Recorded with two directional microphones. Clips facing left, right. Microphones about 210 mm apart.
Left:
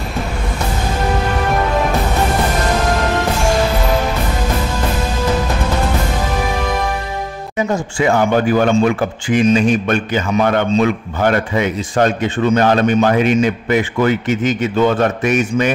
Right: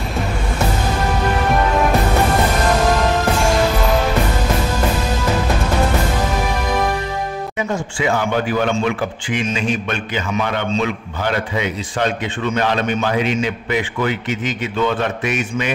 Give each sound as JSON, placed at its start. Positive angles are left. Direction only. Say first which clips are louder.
{"t": 7.5, "sound": "speech", "louder": "left 7 dB", "side_deg": 45}